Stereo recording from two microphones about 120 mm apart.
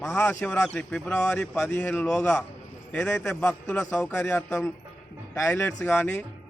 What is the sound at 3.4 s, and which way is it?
A man's voice, 20° left (ahead or behind).